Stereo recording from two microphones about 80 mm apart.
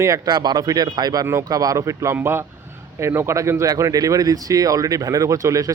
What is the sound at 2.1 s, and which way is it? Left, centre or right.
A man's voice, right.